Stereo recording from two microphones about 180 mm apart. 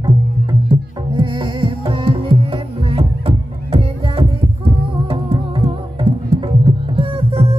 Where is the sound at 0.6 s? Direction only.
25° right (ahead or behind).